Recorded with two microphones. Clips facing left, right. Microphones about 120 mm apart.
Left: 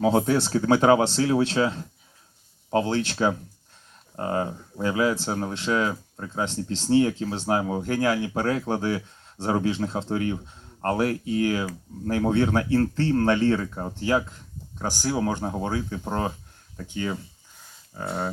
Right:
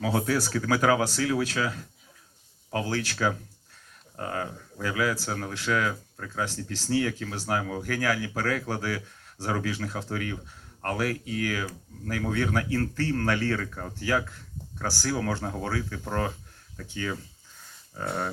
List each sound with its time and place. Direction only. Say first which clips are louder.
0.0 s speech: left 5 dB; 25° left (ahead or behind)